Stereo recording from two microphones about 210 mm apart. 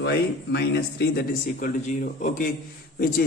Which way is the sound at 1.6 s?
40° left (ahead or behind).